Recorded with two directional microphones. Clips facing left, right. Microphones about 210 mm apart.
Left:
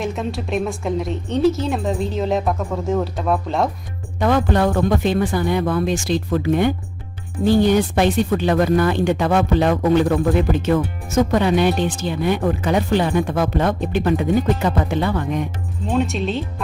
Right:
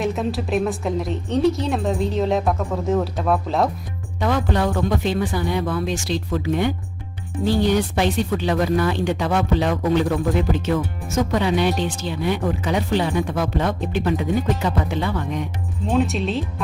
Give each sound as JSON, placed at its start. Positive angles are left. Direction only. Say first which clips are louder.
{"t": 0.0, "sound": "a woman's voice", "louder": "right 1 dB", "side_deg": 0}
{"t": 4.2, "sound": "speech", "louder": "left 4 dB", "side_deg": 50}
{"t": 15.9, "sound": "a woman's voice", "louder": "even", "side_deg": 0}